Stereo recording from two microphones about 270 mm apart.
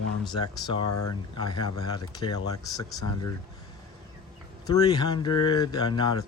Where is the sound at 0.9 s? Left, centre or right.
Left.